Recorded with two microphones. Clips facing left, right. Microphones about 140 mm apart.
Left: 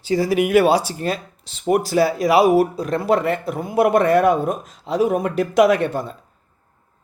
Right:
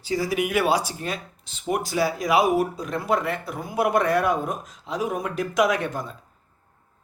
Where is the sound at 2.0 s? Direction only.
65° left (ahead or behind).